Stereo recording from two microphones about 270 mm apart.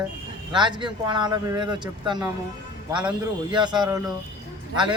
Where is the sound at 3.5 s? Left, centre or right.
Centre.